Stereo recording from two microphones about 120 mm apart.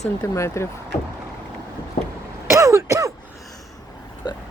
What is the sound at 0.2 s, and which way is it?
Speech, 25° left (ahead or behind).